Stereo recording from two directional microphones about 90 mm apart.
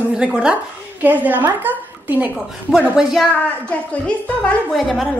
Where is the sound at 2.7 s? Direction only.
5° right (ahead or behind).